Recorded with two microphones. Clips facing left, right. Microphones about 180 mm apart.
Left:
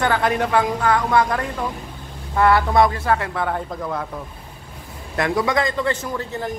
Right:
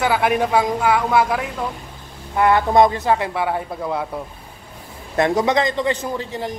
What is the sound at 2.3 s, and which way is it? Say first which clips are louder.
Speech: right 1 dB; 20° right (ahead or behind).